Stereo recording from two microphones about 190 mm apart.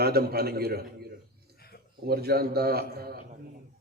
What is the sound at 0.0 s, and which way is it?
Speech, 55° right (ahead or behind).